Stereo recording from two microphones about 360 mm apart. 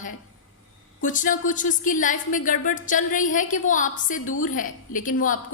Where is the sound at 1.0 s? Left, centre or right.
Left.